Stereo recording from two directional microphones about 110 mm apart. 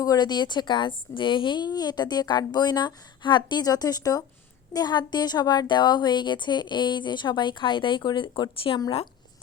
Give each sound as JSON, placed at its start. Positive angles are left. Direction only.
{"t": 0.0, "sound": "a woman's voice", "side_deg": 35}